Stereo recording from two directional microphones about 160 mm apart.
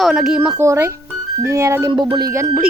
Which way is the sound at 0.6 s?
15° right (ahead or behind).